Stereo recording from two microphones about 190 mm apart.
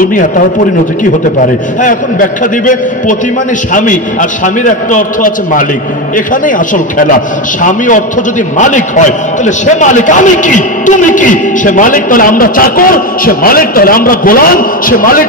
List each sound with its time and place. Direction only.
0.0 s a man's voice: 45° left (ahead or behind)